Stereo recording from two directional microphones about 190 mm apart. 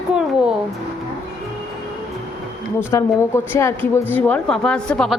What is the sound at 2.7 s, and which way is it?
A woman's voice, 15° left (ahead or behind).